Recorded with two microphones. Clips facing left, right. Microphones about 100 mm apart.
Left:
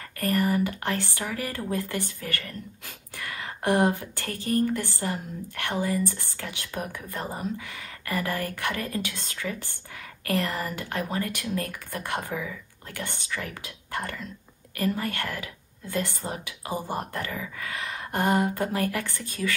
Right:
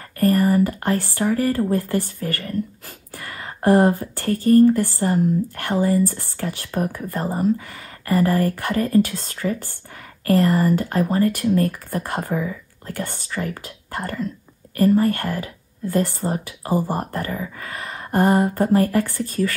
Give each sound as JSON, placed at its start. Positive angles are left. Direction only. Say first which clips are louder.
{"t": 0.2, "sound": "speech", "louder": "right 8 dB", "side_deg": -40}
{"t": 3.2, "sound": "whispering", "louder": "right 3 dB", "side_deg": -40}
{"t": 4.5, "sound": "a woman's voice", "louder": "right 12 dB", "side_deg": -45}